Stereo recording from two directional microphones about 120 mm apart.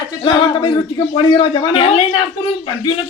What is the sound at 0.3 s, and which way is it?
A man's voice, 40° left (ahead or behind).